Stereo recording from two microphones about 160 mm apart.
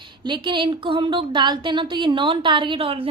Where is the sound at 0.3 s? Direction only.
30° right (ahead or behind).